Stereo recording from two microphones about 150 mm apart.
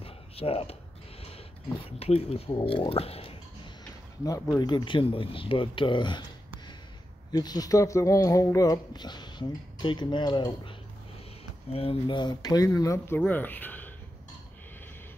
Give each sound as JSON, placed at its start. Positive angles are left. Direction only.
{"t": 0.0, "sound": "a sound", "side_deg": 40}
{"t": 1.2, "sound": "speech", "side_deg": 40}
{"t": 4.6, "sound": "speech", "side_deg": 30}
{"t": 7.3, "sound": "speech", "side_deg": 25}
{"t": 11.7, "sound": "speech", "side_deg": 40}